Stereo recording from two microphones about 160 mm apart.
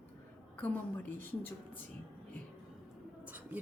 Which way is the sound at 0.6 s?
10° left (ahead or behind).